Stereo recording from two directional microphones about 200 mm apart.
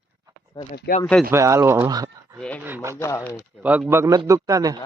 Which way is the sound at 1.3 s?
15° right (ahead or behind).